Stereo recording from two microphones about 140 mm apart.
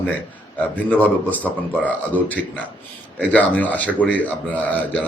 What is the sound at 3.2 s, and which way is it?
Speech, 10° left (ahead or behind).